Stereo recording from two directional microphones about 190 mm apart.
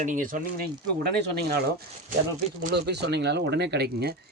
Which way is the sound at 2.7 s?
60° right (ahead or behind).